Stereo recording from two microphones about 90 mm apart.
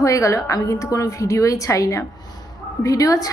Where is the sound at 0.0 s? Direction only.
35° left (ahead or behind).